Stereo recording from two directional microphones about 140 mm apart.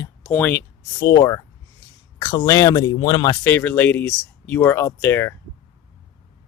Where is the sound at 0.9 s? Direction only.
25° left (ahead or behind).